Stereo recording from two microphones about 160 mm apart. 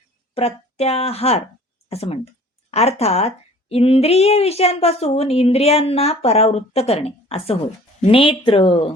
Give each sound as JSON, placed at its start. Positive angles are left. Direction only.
{"t": 0.3, "sound": "a woman's voice", "side_deg": 40}